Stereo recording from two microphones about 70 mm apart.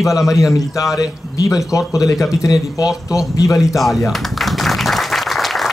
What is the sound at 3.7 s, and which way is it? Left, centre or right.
Applause, centre.